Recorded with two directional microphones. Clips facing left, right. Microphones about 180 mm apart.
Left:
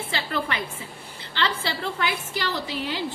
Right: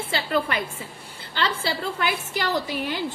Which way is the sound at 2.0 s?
45° right (ahead or behind).